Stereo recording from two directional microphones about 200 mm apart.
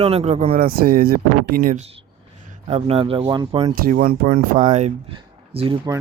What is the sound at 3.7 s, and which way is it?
Speech, 45° right (ahead or behind).